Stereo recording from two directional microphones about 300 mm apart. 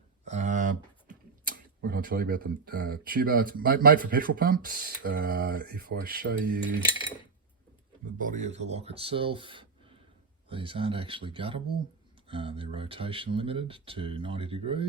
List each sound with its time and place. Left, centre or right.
0.3 s speech: right
8.2 s speech: right